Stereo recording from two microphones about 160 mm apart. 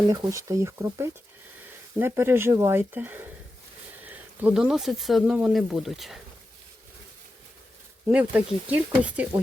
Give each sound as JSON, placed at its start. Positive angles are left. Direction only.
{"t": 0.1, "sound": "speech", "side_deg": -20}
{"t": 8.0, "sound": "speech", "side_deg": -10}